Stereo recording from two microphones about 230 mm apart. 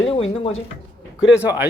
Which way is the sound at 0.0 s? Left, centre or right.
Left.